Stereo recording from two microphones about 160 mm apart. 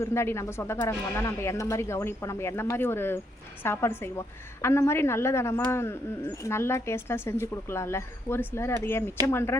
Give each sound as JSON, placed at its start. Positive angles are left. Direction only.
{"t": 0.0, "sound": "speech", "side_deg": 15}